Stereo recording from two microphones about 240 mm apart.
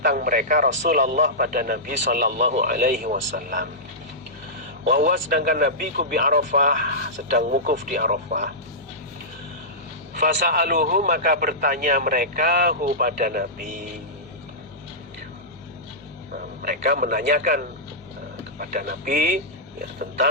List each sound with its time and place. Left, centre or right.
0.0 s a man's voice: right
4.9 s a man's voice: right
10.2 s a man's voice: right
16.6 s a man's voice: right